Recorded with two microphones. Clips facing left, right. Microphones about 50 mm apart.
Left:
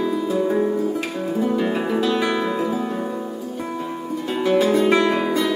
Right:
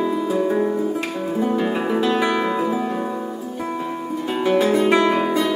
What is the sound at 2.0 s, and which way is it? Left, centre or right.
Music, right.